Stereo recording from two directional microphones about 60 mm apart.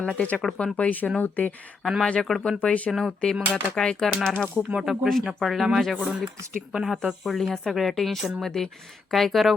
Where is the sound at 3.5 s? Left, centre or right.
Centre.